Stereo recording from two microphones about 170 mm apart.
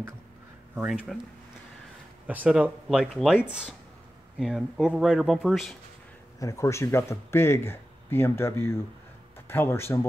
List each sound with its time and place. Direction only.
0.7 s speech: 5° right (ahead or behind)
2.2 s speech: 10° right (ahead or behind)
6.4 s speech: 20° left (ahead or behind)